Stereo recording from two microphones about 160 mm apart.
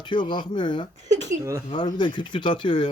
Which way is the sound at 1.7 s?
30° left (ahead or behind).